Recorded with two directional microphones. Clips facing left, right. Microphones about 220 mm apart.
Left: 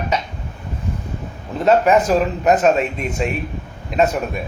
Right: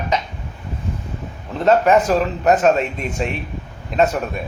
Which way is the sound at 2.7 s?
40° right (ahead or behind).